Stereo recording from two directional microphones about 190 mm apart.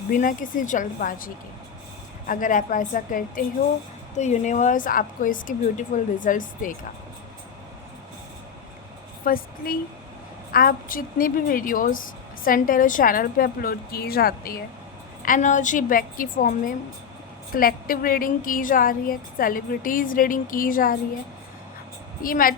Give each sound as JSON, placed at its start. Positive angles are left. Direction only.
{"t": 0.1, "sound": "a woman's voice", "side_deg": 45}
{"t": 9.2, "sound": "a woman's voice", "side_deg": 50}
{"t": 22.2, "sound": "a woman's voice", "side_deg": 50}